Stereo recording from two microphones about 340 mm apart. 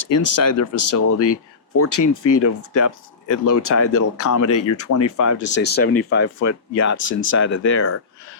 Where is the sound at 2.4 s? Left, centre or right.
Left.